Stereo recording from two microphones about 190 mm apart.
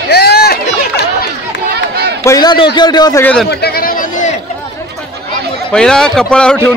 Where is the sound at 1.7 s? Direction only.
60° right (ahead or behind).